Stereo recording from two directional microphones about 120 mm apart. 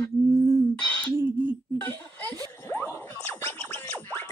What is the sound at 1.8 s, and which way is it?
Chuckle, 20° left (ahead or behind).